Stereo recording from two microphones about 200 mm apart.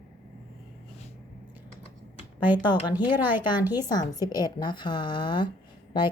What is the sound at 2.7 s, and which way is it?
Speech, 20° left (ahead or behind).